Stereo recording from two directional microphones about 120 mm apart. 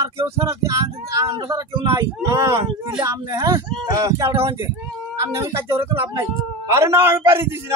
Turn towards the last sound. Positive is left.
turn(degrees=-20)  # may be behind; listen again after turning